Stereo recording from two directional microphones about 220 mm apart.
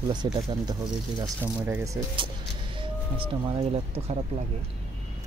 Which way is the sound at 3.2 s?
25° right (ahead or behind).